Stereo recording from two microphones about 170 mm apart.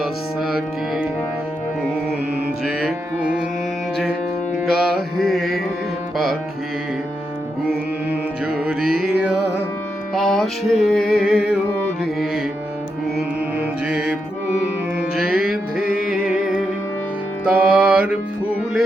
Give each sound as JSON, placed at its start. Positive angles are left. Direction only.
{"t": 0.0, "sound": "music", "side_deg": 0}
{"t": 2.6, "sound": "music", "side_deg": -5}
{"t": 4.6, "sound": "music", "side_deg": 0}
{"t": 7.6, "sound": "music", "side_deg": -5}
{"t": 10.2, "sound": "music", "side_deg": 0}
{"t": 13.1, "sound": "music", "side_deg": -5}
{"t": 16.0, "sound": "music", "side_deg": -5}